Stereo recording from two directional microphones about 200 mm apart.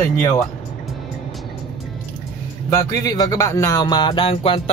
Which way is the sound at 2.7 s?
15° left (ahead or behind).